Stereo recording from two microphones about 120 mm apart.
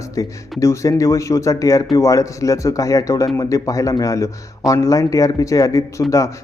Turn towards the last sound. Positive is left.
turn(degrees=0)  # may be behind; listen again after turning